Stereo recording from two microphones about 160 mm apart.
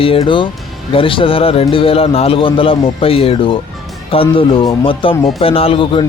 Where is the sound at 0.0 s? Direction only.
35° left (ahead or behind).